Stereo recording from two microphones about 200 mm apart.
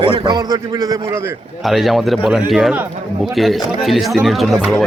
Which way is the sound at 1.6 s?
Centre (ahead or behind).